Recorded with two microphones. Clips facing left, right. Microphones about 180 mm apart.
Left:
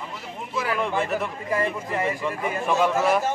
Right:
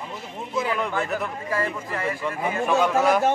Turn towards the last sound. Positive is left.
turn(degrees=0)  # may be behind; listen again after turning